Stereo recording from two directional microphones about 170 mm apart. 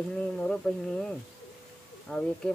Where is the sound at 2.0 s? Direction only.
5° left (ahead or behind).